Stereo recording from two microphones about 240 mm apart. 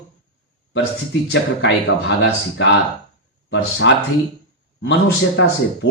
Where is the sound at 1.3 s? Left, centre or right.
Left.